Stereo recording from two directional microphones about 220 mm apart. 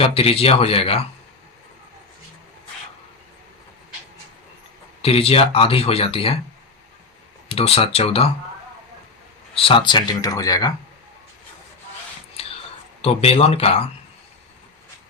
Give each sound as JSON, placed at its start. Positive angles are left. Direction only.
{"t": 0.0, "sound": "speech", "side_deg": 25}
{"t": 5.0, "sound": "speech", "side_deg": 25}
{"t": 7.4, "sound": "speech", "side_deg": 25}
{"t": 9.6, "sound": "speech", "side_deg": 25}
{"t": 12.4, "sound": "a sound", "side_deg": 25}
{"t": 13.0, "sound": "speech", "side_deg": 25}